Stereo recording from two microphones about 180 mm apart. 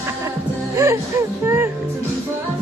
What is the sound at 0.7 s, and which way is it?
Music, 15° right (ahead or behind).